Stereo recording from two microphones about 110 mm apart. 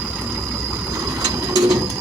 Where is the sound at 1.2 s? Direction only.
35° right (ahead or behind).